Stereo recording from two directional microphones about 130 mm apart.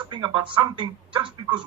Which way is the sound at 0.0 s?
40° right (ahead or behind).